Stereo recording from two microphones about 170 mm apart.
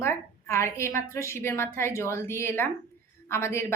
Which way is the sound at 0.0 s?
15° left (ahead or behind).